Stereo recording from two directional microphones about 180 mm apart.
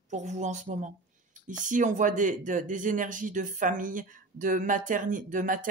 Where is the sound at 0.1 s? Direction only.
40° right (ahead or behind).